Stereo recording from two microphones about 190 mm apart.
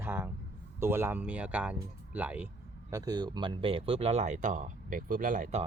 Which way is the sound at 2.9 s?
20° right (ahead or behind).